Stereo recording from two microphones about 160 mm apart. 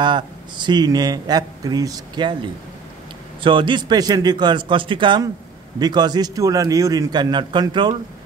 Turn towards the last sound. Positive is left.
turn(degrees=-30)  # may be behind; listen again after turning